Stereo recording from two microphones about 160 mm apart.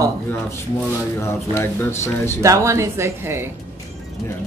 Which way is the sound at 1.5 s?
15° left (ahead or behind).